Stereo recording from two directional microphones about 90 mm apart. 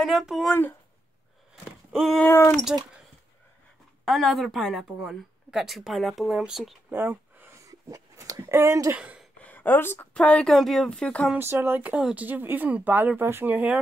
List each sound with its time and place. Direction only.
0.0 s speech: centre (ahead or behind)
0.5 s speech: 20° left (ahead or behind)
1.5 s a sound: 5° right (ahead or behind)
2.2 s speech: 25° left (ahead or behind)
2.5 s speech: centre (ahead or behind)
4.0 s speech: centre (ahead or behind)
6.9 s a sound: 20° right (ahead or behind)
7.6 s dog: 40° right (ahead or behind)
8.5 s speech: 30° right (ahead or behind)
8.9 s speech: 15° right (ahead or behind)
9.4 s a sound: 20° left (ahead or behind)
10.1 s speech: 10° left (ahead or behind)
11.3 s speech: 25° right (ahead or behind)